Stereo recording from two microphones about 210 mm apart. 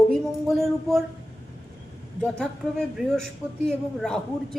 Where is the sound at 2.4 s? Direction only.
5° left (ahead or behind).